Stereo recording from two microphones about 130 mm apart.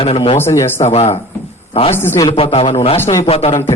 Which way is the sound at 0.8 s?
55° left (ahead or behind).